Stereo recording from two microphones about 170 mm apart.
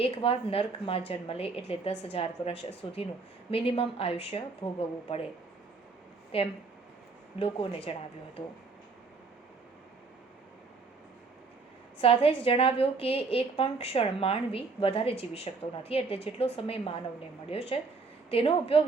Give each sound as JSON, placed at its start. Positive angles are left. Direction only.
{"t": 0.0, "sound": "a woman's voice", "side_deg": 35}
{"t": 6.3, "sound": "a woman's voice", "side_deg": 35}
{"t": 11.9, "sound": "a woman's voice", "side_deg": 35}